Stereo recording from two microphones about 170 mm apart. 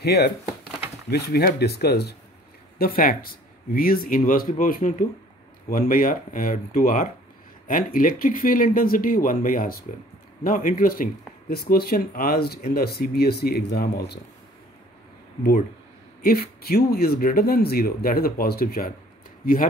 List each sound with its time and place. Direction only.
0.0 s speech: 70° left (ahead or behind)
2.8 s speech: 60° left (ahead or behind)
16.2 s speech: 65° left (ahead or behind)